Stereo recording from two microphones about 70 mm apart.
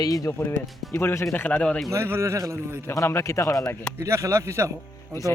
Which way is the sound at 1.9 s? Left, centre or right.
Right.